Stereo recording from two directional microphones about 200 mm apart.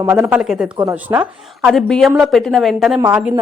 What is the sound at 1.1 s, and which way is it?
Speech, 15° right (ahead or behind).